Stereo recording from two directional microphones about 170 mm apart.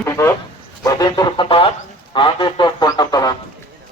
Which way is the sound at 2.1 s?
30° left (ahead or behind).